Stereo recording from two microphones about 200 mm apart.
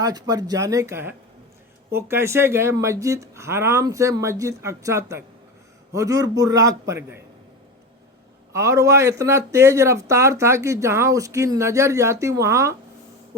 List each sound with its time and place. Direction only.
0.0 s speech: 20° right (ahead or behind)
8.5 s speech: 15° right (ahead or behind)